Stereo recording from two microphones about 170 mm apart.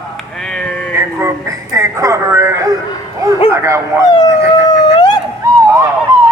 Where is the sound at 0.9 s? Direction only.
15° right (ahead or behind).